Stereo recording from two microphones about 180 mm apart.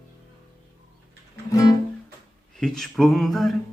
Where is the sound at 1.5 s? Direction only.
20° left (ahead or behind).